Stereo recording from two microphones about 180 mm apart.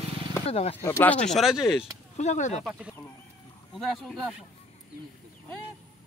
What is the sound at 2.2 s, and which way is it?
Speech, 40° left (ahead or behind).